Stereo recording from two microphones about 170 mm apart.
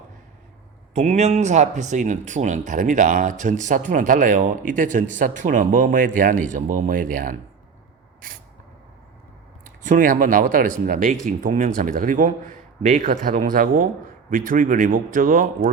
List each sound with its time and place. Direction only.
0.9 s speech: 40° right (ahead or behind)
9.6 s speech: 50° right (ahead or behind)